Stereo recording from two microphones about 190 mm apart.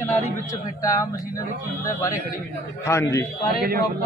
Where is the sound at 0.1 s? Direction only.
15° left (ahead or behind).